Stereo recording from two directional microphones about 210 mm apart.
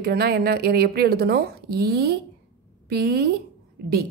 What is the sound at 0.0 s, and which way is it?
A woman's voice, 50° right (ahead or behind).